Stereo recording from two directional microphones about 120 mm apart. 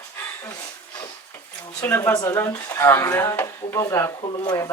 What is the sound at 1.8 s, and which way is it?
Speech, 20° left (ahead or behind).